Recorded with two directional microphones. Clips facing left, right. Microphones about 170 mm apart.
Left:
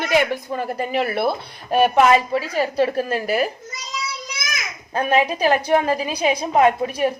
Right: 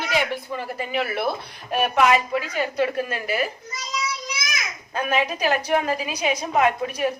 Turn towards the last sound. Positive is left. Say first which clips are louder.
# left 4 dB
turn(degrees=30)  # may be behind; listen again after turning